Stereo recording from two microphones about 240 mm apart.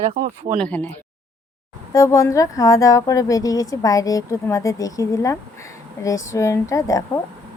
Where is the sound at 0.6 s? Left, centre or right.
Centre.